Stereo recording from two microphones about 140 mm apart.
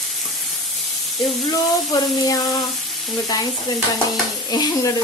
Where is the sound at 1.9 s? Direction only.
25° left (ahead or behind).